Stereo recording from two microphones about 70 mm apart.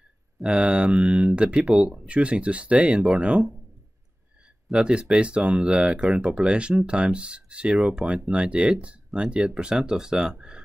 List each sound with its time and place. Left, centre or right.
0.4 s speech: centre
4.7 s speech: centre